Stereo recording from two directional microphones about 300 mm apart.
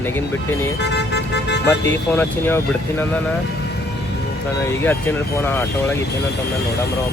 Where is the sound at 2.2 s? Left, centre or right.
Centre.